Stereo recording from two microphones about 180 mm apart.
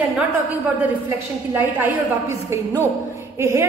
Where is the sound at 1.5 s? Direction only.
10° right (ahead or behind).